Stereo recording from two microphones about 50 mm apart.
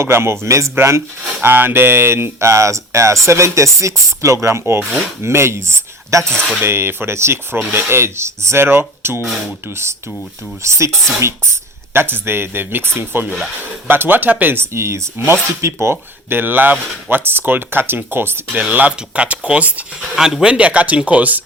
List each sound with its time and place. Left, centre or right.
0.0 s speech: right
1.4 s speech: right
6.6 s speech: right
7.5 s speech: right
10.6 s speech: right
11.9 s speech: right
14.5 s speech: right
15.3 s speech: right
16.4 s speech: right
18.5 s speech: right
20.1 s speech: centre
20.5 s speech: right